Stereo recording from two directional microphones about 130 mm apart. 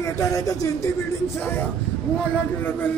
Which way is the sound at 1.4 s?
15° left (ahead or behind).